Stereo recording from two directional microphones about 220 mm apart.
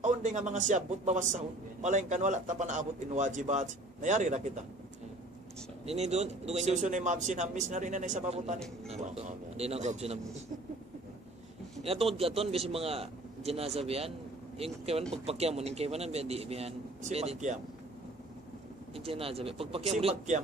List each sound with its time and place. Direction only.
0.0 s a man's voice: 35° right (ahead or behind)
5.8 s a man's voice: 30° right (ahead or behind)
8.5 s a man's voice: centre (ahead or behind)
8.9 s a man's voice: 30° right (ahead or behind)
11.8 s a man's voice: 25° right (ahead or behind)
18.9 s a man's voice: 25° right (ahead or behind)